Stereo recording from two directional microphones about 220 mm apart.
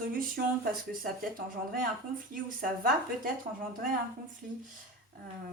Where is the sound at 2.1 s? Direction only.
40° right (ahead or behind).